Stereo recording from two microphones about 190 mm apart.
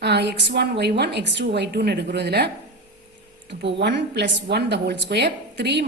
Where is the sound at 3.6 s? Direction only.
65° right (ahead or behind).